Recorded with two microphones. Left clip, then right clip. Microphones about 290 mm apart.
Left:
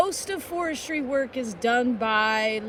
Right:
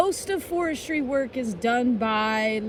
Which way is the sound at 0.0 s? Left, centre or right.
Centre.